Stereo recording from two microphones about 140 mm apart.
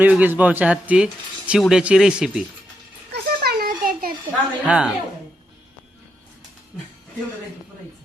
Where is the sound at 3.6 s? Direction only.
90° right.